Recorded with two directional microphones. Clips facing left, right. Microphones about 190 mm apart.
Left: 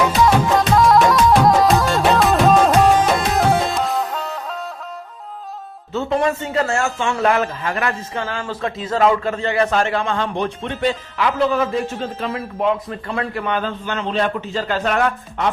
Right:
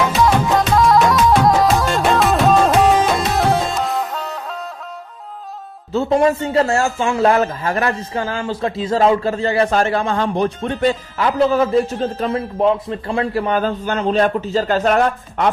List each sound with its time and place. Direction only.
0.1 s music: centre (ahead or behind)
5.9 s a man's voice: 35° right (ahead or behind)